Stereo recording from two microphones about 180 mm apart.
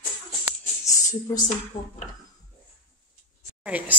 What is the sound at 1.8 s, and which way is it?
Speech, 30° left (ahead or behind).